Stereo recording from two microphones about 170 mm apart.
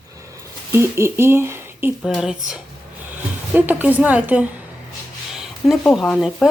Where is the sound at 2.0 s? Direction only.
Centre (ahead or behind).